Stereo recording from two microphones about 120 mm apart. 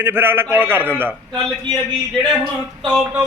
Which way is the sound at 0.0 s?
20° right (ahead or behind).